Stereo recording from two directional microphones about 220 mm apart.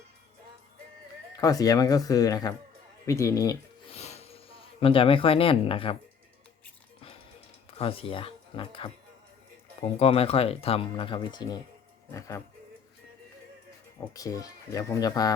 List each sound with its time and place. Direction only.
1.4 s speech: 15° left (ahead or behind)
3.9 s a sound: 30° left (ahead or behind)
7.8 s speech: 25° left (ahead or behind)
14.1 s speech: 15° left (ahead or behind)